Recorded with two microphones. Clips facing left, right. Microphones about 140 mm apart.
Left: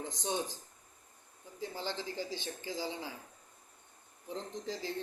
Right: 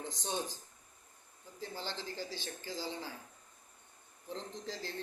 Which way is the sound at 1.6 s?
15° left (ahead or behind).